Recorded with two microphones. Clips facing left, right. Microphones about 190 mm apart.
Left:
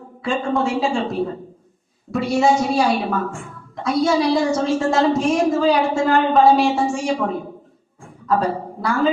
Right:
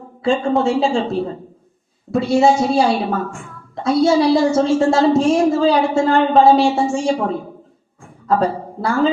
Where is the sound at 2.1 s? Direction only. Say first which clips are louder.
Right 3 dB; 25° right (ahead or behind).